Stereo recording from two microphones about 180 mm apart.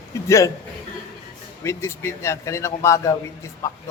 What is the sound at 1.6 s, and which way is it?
Speech, 15° left (ahead or behind).